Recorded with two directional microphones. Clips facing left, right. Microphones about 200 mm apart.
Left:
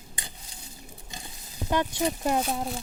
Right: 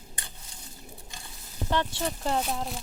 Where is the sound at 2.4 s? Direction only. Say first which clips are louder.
Left 2 dB; centre (ahead or behind).